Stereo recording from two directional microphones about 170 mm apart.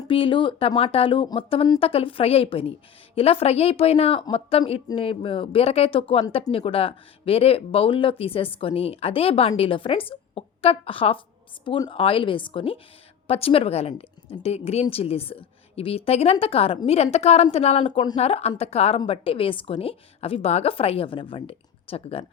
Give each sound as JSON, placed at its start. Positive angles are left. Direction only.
{"t": 0.0, "sound": "a woman's voice", "side_deg": 30}